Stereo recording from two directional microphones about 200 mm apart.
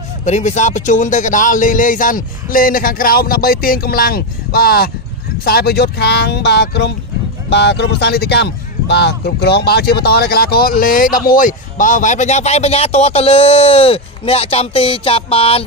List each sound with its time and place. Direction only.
0.2 s speech: 35° left (ahead or behind)